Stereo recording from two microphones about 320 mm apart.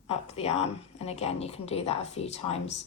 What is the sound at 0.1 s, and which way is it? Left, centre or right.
A woman's voice, centre.